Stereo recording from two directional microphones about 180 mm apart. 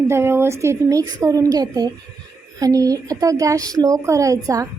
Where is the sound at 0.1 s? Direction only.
15° right (ahead or behind).